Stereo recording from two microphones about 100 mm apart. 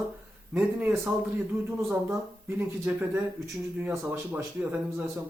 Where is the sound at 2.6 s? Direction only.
25° right (ahead or behind).